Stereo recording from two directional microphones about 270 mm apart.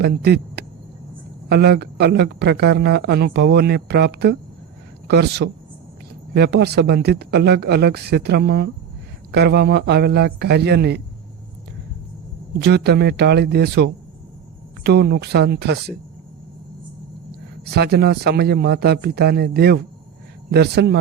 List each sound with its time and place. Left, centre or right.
0.0 s speech: right
12.5 s speech: right
17.7 s speech: right